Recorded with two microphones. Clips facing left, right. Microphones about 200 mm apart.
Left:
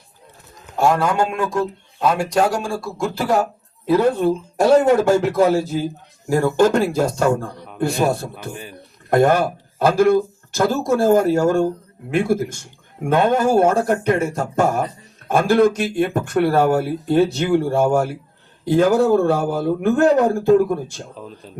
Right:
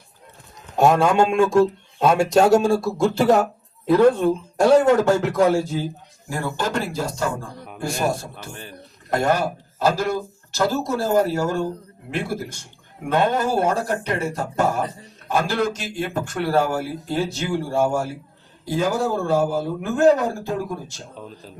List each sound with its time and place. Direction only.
0.8 s a man's voice: 20° right (ahead or behind)
3.8 s a man's voice: 5° left (ahead or behind)
6.2 s speech: 45° left (ahead or behind)
9.0 s a man's voice: 55° left (ahead or behind)
21.2 s speech: centre (ahead or behind)